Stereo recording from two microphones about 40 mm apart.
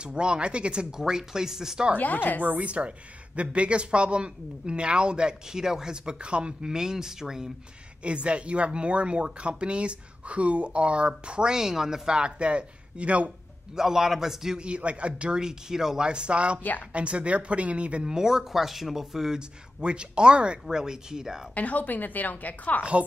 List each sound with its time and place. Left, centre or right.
0.0 s speech: right
2.0 s speech: left
2.6 s speech: right; by 7.5 s centre
8.0 s speech: right; by 12.2 s centre
12.2 s speech: right
13.7 s speech: centre
14.6 s speech: right
15.4 s speech: centre
16.1 s speech: right
18.1 s speech: centre
19.8 s speech: right
21.5 s speech: left
22.8 s speech: right